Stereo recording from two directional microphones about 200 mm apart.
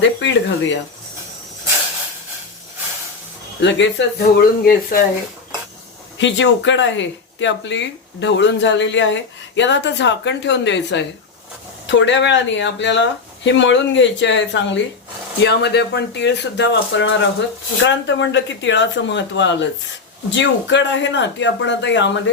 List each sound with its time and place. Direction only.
0.0 s speech: 65° left (ahead or behind)
3.6 s speech: 65° left (ahead or behind); by 4.9 s 45° left (ahead or behind)
6.1 s speech: 65° left (ahead or behind)